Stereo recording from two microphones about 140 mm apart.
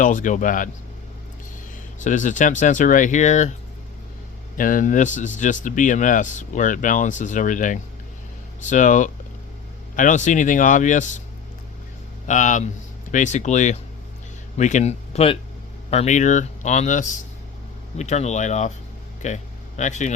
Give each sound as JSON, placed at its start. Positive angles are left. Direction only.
{"t": 0.0, "sound": "speech", "side_deg": 65}
{"t": 2.0, "sound": "speech", "side_deg": 65}
{"t": 4.5, "sound": "speech", "side_deg": 75}
{"t": 12.3, "sound": "speech", "side_deg": 65}